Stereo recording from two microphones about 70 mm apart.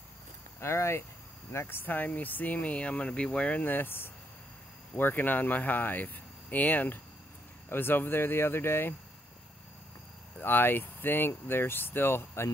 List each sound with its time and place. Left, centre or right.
0.6 s speech: left
10.4 s speech: left